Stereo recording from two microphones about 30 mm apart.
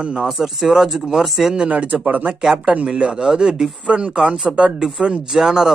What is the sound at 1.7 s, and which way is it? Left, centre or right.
Speech, right.